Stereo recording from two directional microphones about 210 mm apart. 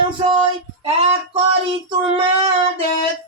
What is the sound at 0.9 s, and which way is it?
Speech, 30° right (ahead or behind).